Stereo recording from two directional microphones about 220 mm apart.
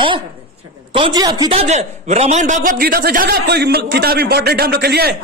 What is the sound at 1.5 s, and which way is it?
A man's voice, 30° right (ahead or behind).